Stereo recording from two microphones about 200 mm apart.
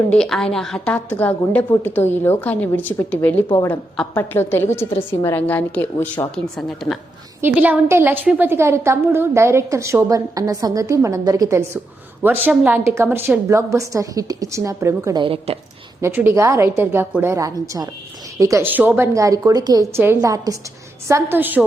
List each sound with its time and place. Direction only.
0.1 s a woman's voice: 5° left (ahead or behind)
7.4 s a woman's voice: 10° right (ahead or behind); by 15.5 s 25° right (ahead or behind)
16.0 s a woman's voice: 10° right (ahead or behind)